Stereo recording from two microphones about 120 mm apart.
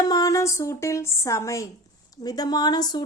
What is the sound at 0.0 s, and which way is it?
A woman's voice, 30° left (ahead or behind).